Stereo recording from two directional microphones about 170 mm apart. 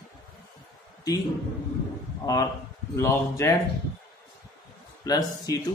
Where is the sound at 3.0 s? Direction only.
15° left (ahead or behind).